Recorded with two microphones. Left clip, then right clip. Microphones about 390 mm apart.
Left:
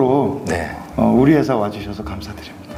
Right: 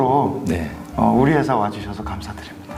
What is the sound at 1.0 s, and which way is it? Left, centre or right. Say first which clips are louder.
Speech: left 2 dB; right.